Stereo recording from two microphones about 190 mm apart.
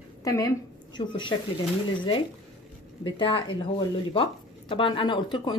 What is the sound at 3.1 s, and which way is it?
A woman's voice, 25° left (ahead or behind).